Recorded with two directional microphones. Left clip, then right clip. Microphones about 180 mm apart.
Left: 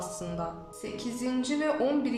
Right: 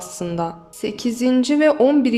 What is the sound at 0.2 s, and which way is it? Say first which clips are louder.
Speech: right 11 dB; 50° right (ahead or behind).